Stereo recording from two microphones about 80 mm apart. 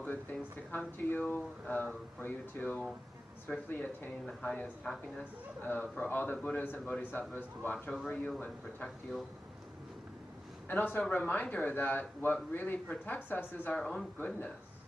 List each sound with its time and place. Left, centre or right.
0.0 s speech: left; by 4.9 s centre
5.6 s speech: left
10.7 s speech: left
13.7 s a man's voice: centre
14.1 s speech: left